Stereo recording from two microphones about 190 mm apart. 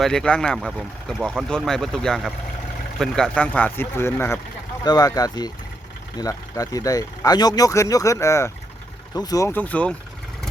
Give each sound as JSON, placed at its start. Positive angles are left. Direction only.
{"t": 0.0, "sound": "speech", "side_deg": 5}